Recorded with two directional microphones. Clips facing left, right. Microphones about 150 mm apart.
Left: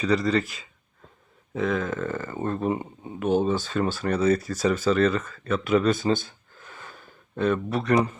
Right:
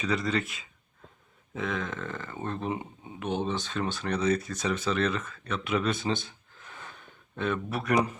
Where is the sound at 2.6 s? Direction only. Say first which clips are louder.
Left 6 dB; 45° left (ahead or behind).